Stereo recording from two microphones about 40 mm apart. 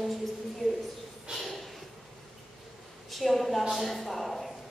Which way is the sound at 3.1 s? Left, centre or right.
Centre.